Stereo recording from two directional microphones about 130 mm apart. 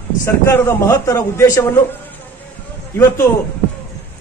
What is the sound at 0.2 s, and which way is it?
A man's voice, 20° left (ahead or behind).